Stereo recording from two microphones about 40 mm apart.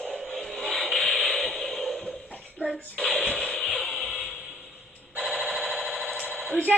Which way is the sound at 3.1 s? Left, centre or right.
Centre.